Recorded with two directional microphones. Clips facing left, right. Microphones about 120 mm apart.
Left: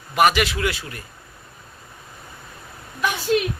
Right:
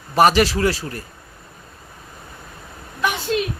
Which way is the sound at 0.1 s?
35° right (ahead or behind).